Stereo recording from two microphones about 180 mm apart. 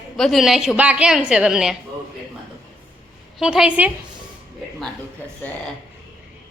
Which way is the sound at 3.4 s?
5° right (ahead or behind).